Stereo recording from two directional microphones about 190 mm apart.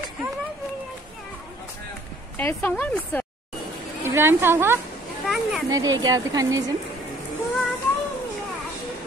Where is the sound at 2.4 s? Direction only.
10° left (ahead or behind).